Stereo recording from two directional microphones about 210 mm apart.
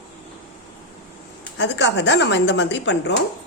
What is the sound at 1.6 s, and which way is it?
A woman's voice, 55° left (ahead or behind).